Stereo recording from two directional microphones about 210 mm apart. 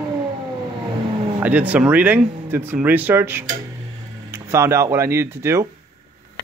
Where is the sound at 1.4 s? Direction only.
10° right (ahead or behind).